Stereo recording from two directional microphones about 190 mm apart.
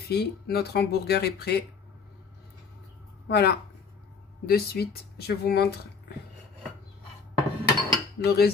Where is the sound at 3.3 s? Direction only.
55° left (ahead or behind).